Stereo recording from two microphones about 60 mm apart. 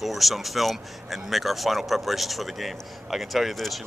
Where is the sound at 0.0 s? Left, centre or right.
Centre.